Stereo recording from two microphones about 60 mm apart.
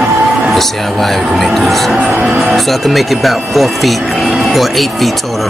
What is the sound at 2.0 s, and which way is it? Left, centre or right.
Music, right.